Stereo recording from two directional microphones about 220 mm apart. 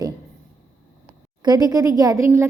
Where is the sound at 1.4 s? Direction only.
20° right (ahead or behind).